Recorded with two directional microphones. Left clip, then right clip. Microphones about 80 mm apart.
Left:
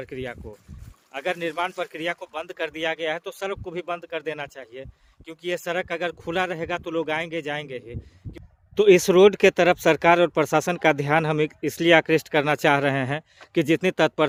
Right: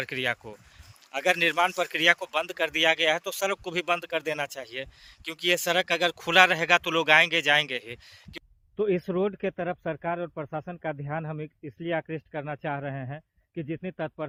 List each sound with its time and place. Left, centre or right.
0.0 s speech: left